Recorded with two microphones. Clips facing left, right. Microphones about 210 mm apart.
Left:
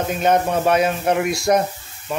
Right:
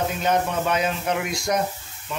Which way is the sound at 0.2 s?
55° left (ahead or behind).